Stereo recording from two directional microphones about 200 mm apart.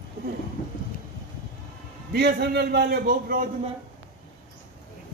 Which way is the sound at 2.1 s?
55° right (ahead or behind).